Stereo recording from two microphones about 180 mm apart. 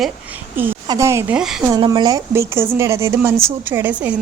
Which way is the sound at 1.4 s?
5° right (ahead or behind).